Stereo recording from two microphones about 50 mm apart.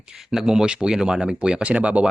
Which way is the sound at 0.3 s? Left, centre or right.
Centre.